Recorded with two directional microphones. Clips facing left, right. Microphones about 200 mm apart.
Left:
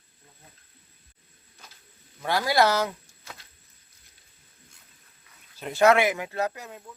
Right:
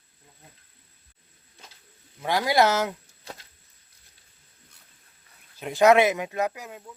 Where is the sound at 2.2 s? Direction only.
15° right (ahead or behind).